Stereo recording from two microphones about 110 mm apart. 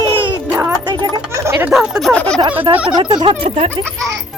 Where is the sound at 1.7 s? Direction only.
5° right (ahead or behind).